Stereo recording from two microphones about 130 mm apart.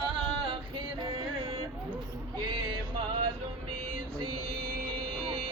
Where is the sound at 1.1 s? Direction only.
45° right (ahead or behind).